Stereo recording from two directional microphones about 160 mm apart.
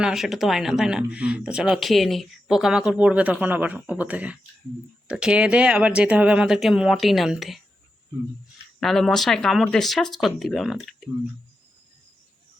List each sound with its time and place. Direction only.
0.0 s speech: 5° right (ahead or behind)
8.8 s speech: centre (ahead or behind)